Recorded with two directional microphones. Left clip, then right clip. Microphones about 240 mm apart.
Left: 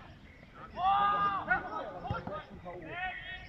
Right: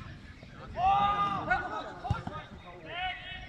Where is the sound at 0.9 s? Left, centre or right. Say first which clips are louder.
Right 1 dB; centre.